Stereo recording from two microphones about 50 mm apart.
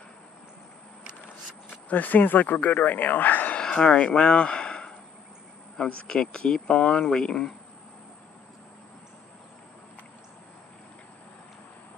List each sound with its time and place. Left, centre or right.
1.7 s speech: left
3.5 s speech: centre